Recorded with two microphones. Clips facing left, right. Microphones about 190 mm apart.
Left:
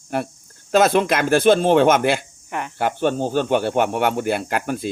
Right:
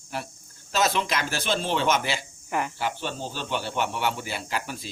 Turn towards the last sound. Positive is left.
turn(degrees=55)  # may be behind; listen again after turning